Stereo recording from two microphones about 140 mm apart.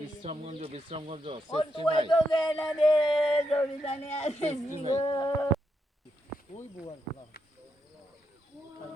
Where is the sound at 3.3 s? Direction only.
40° left (ahead or behind).